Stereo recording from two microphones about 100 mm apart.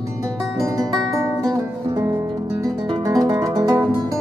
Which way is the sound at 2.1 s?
45° right (ahead or behind).